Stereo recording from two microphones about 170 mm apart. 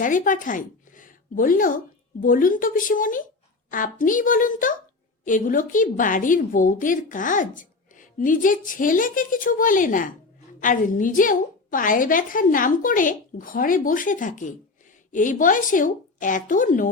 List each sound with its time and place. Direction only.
0.0 s a woman's voice: 50° left (ahead or behind)